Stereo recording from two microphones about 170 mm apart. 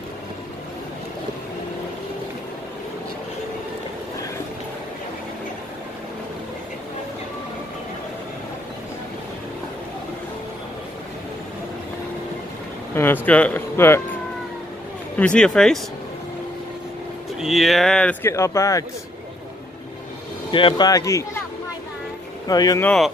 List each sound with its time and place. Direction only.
12.9 s speech: 10° left (ahead or behind)
15.1 s speech: 5° left (ahead or behind)
17.4 s speech: centre (ahead or behind)
18.3 s speech: 15° left (ahead or behind)
20.5 s speech: 30° left (ahead or behind)
22.5 s speech: 20° left (ahead or behind)
22.8 s speech: centre (ahead or behind)